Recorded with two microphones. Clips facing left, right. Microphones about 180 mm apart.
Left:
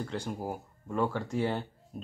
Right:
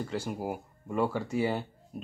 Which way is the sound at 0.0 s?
5° right (ahead or behind).